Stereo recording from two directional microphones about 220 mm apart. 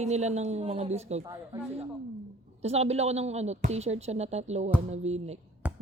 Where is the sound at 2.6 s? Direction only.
30° right (ahead or behind).